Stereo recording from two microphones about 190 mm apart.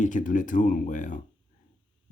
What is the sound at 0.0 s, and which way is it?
Speech, 45° left (ahead or behind).